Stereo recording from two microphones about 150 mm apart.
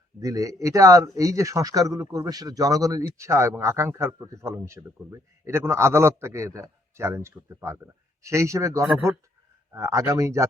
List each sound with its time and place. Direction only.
0.2 s speech: 20° right (ahead or behind)